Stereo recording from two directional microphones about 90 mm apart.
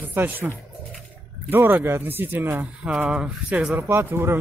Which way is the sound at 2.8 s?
10° right (ahead or behind).